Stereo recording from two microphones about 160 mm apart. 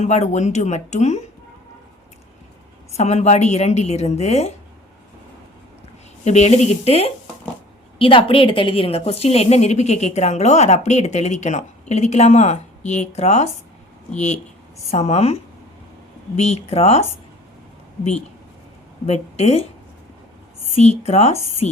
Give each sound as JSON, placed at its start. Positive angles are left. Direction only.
{"t": 0.0, "sound": "a woman's voice", "side_deg": 45}
{"t": 2.9, "sound": "a woman's voice", "side_deg": 45}
{"t": 6.2, "sound": "a woman's voice", "side_deg": 45}
{"t": 14.8, "sound": "a woman's voice", "side_deg": 45}
{"t": 19.0, "sound": "speech", "side_deg": 40}
{"t": 20.7, "sound": "speech", "side_deg": 40}